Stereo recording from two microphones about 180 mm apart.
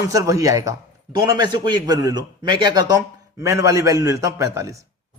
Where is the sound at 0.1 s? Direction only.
20° right (ahead or behind).